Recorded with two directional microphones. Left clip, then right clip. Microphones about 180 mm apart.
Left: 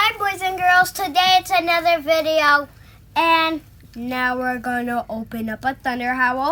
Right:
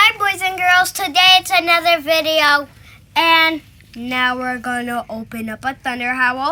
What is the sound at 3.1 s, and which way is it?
Speech, 5° left (ahead or behind).